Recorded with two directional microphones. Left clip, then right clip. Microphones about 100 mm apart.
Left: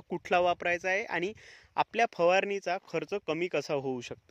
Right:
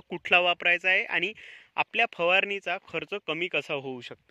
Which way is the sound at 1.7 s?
65° left (ahead or behind).